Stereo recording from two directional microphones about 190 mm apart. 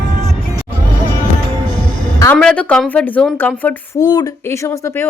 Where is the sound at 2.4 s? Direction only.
5° left (ahead or behind).